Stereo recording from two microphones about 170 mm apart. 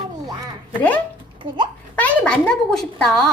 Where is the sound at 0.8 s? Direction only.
10° left (ahead or behind).